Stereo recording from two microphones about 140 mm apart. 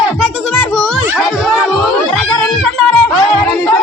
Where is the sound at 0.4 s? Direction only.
5° left (ahead or behind).